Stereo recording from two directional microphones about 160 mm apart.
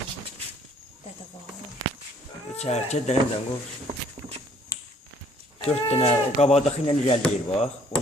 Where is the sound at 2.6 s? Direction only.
40° left (ahead or behind).